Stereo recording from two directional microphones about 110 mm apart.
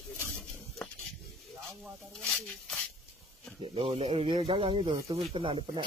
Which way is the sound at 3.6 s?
55° right (ahead or behind).